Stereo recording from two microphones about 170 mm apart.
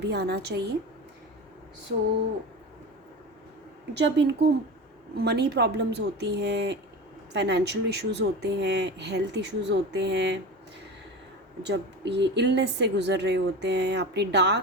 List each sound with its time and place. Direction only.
0.0 s a woman's voice: 75° right (ahead or behind)
3.9 s speech: 85° right
5.1 s speech: 70° right (ahead or behind); by 10.4 s 90° right
11.6 s speech: 90° right